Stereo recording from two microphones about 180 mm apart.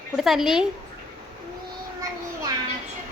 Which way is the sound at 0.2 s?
Centre (ahead or behind).